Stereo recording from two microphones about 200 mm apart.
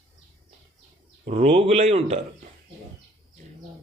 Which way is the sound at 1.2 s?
30° right (ahead or behind).